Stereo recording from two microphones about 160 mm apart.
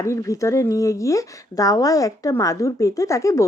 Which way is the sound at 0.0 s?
20° left (ahead or behind).